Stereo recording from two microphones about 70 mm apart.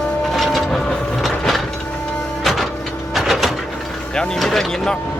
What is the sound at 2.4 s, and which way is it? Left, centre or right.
Music, centre.